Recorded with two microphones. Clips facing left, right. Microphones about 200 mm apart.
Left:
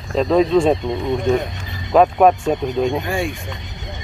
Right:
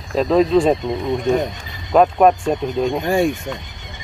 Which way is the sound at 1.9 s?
Centre (ahead or behind).